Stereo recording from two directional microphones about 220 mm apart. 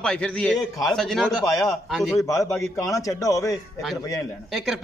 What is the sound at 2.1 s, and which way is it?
A man's voice, 15° left (ahead or behind).